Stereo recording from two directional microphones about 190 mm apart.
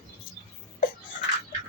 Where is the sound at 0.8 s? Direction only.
45° left (ahead or behind).